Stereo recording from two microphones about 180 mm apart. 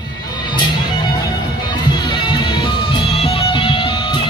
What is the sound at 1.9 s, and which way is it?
Music, 25° left (ahead or behind).